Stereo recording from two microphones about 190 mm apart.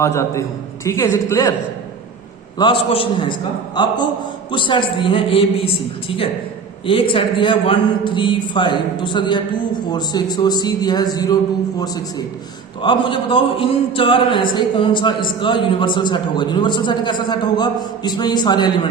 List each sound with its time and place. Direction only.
0.0 s a woman's voice: 15° left (ahead or behind)
2.6 s a man's voice: 25° left (ahead or behind)
12.8 s a man's voice: 25° left (ahead or behind)